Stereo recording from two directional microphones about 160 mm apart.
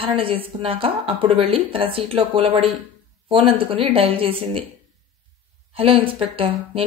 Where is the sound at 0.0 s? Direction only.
35° right (ahead or behind).